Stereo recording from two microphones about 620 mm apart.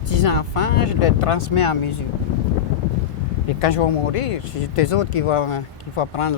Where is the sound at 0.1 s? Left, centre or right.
Left.